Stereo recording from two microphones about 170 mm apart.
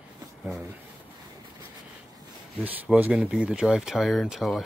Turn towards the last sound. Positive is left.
turn(degrees=0)  # may be behind; listen again after turning